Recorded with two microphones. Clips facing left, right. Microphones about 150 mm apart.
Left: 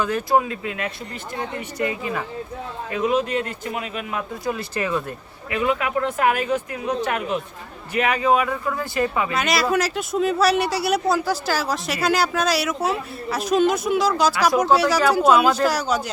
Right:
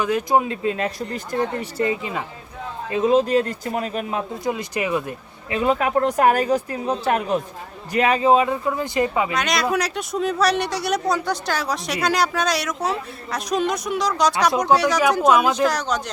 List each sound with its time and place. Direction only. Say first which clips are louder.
0.0 s speech: right 1 dB; 15° right (ahead or behind); by 1.9 s 40° right (ahead or behind)
1.9 s speech: right 1 dB; 20° right (ahead or behind)
4.4 s speech: even; 15° right (ahead or behind)
5.5 s speech: right 2 dB; 30° right (ahead or behind)
9.3 s speech: left 1 dB; 5° left (ahead or behind)